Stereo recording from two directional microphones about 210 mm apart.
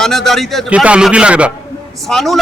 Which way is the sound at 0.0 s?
Centre (ahead or behind).